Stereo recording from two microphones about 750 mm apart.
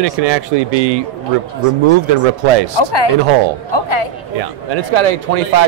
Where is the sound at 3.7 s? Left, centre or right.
Left.